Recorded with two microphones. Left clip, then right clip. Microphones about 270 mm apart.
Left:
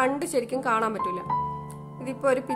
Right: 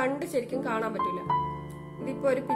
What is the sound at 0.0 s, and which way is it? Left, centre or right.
Speech, left.